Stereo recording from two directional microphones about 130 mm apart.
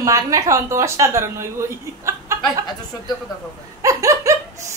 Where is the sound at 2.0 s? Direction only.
20° right (ahead or behind).